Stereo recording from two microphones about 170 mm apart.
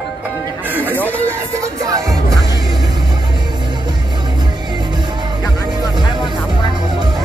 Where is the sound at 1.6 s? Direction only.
20° right (ahead or behind).